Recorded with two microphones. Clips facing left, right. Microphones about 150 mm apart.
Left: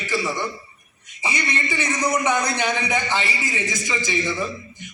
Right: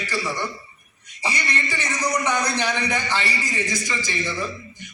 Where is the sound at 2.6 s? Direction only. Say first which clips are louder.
Left 1 dB; 20° left (ahead or behind).